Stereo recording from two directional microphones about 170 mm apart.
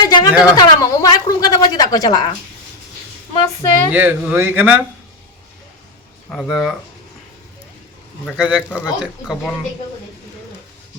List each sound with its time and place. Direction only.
0.0 s a sound: 25° left (ahead or behind)
3.3 s a woman's voice: 20° left (ahead or behind)
3.9 s a man's voice: 10° right (ahead or behind)
6.3 s speech: centre (ahead or behind)
8.4 s a man's voice: 5° right (ahead or behind)